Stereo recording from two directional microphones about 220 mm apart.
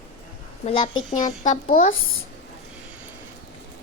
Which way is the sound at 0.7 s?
25° left (ahead or behind).